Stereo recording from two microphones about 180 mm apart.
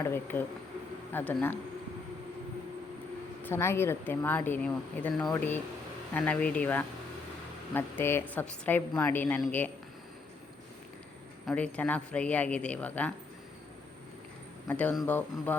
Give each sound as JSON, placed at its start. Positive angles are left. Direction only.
{"t": 0.0, "sound": "a woman's voice", "side_deg": 10}
{"t": 3.4, "sound": "a woman's voice", "side_deg": 15}
{"t": 11.4, "sound": "a woman's voice", "side_deg": 5}
{"t": 14.7, "sound": "a woman's voice", "side_deg": 10}